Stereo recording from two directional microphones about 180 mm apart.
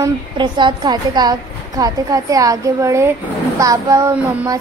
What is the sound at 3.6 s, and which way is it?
Child singing, 15° right (ahead or behind).